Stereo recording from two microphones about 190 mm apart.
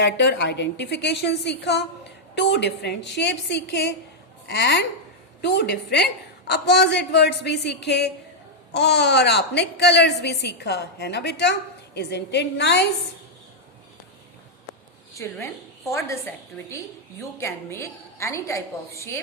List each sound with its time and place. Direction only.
0.0 s a woman's voice: 70° left (ahead or behind)
15.1 s a woman's voice: 15° left (ahead or behind)